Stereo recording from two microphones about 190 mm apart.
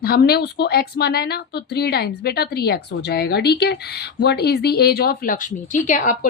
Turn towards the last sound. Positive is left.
turn(degrees=45)  # may be behind; listen again after turning